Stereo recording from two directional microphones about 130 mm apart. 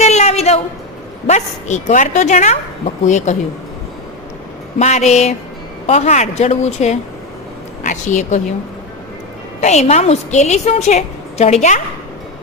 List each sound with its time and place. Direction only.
0.0 s a sound: 60° left (ahead or behind)
1.3 s a woman's voice: 65° left (ahead or behind)
4.8 s a woman's voice: 60° left (ahead or behind)
7.9 s a woman's voice: 70° left (ahead or behind)
9.6 s a woman's voice: 60° left (ahead or behind)